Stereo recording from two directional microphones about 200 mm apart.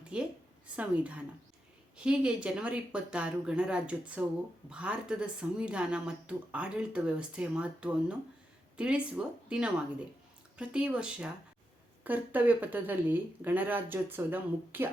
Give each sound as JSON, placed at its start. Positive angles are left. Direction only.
{"t": 0.1, "sound": "a woman's voice", "side_deg": -5}